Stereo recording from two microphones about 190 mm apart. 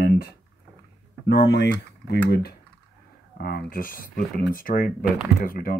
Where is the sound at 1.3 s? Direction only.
65° left (ahead or behind).